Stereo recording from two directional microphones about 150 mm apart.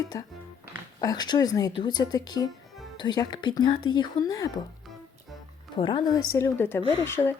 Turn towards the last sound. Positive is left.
turn(degrees=15)  # may be behind; listen again after turning